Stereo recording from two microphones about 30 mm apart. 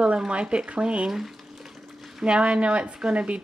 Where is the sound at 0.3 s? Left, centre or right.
Right.